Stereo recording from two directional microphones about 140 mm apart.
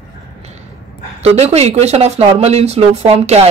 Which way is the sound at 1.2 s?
50° right (ahead or behind).